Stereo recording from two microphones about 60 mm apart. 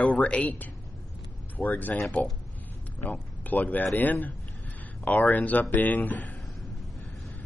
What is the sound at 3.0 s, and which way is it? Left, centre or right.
A man's voice, left.